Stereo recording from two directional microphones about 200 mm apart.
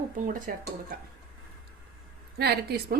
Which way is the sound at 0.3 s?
45° right (ahead or behind).